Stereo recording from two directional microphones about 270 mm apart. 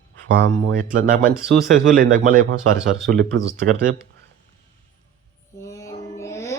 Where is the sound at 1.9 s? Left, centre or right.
Right.